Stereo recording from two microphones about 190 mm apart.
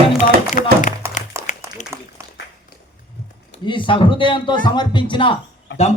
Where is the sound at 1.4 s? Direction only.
40° left (ahead or behind).